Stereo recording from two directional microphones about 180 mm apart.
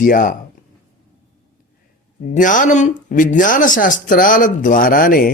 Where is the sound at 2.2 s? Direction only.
45° left (ahead or behind).